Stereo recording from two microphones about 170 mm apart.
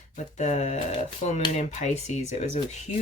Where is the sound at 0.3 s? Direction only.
40° left (ahead or behind).